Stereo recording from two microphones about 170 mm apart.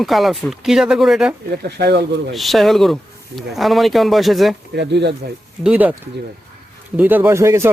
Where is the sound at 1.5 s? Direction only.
70° right (ahead or behind).